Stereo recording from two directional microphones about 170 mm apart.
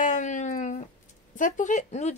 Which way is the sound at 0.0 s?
45° left (ahead or behind).